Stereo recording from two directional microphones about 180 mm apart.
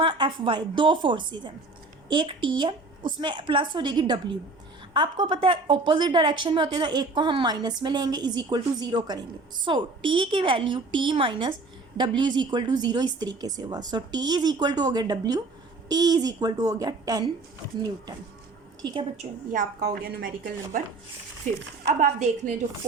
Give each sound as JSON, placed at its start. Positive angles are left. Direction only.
{"t": 0.0, "sound": "a woman's voice", "side_deg": -25}
{"t": 18.8, "sound": "a woman's voice", "side_deg": -20}
{"t": 19.2, "sound": "a woman's voice", "side_deg": -45}
{"t": 19.8, "sound": "speech", "side_deg": -60}
{"t": 22.0, "sound": "a woman's voice", "side_deg": -40}